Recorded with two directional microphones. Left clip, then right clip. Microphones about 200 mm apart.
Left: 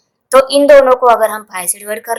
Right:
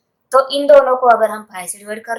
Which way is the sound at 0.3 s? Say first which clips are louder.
Left 4 dB; 40° left (ahead or behind).